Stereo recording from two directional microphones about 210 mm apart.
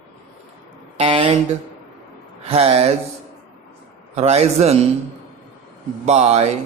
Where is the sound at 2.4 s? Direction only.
30° right (ahead or behind).